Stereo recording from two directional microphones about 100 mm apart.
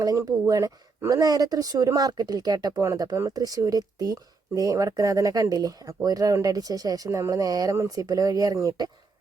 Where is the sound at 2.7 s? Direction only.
30° right (ahead or behind).